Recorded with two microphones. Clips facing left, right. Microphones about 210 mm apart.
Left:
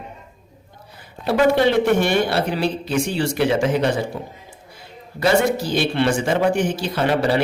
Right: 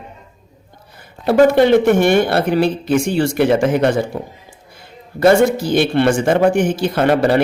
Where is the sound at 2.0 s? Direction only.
50° right (ahead or behind).